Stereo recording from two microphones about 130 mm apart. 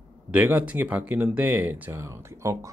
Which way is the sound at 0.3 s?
10° right (ahead or behind).